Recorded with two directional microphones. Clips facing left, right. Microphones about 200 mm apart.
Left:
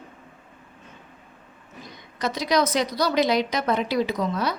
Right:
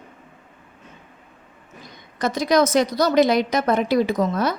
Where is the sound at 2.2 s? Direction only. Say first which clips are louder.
Right 4 dB; 50° right (ahead or behind).